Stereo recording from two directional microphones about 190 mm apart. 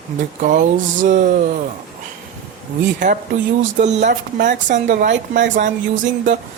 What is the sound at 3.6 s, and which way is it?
Speech, 40° right (ahead or behind).